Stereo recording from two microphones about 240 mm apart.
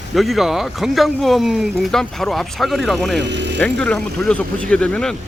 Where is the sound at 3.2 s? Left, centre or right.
Right.